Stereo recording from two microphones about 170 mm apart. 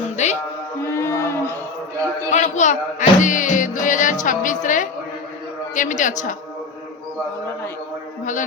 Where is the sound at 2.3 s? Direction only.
45° left (ahead or behind).